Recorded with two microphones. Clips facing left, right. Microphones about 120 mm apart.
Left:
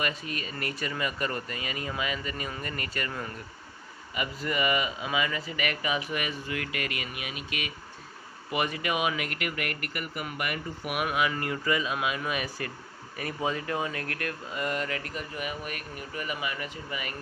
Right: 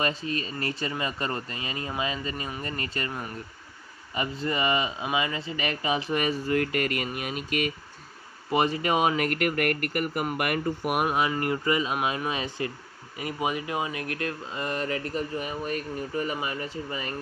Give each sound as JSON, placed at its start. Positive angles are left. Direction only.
{"t": 0.0, "sound": "speech", "side_deg": -30}
{"t": 8.4, "sound": "speech", "side_deg": -30}